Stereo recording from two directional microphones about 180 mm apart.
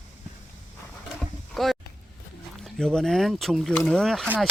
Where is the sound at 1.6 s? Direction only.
Centre (ahead or behind).